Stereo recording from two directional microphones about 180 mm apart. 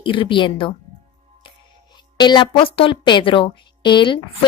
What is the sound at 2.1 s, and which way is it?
A woman's voice, 25° left (ahead or behind).